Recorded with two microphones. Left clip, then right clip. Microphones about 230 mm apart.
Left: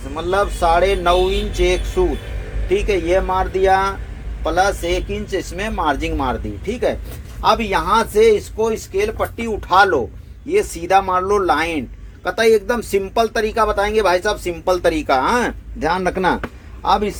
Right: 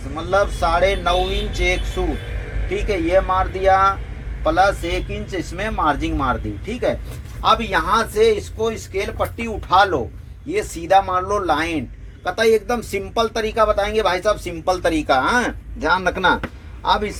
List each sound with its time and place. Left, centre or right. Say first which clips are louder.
0.2 s speech: left 1 dB; left